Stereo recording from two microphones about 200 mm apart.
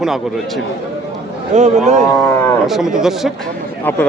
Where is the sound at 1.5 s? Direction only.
35° right (ahead or behind).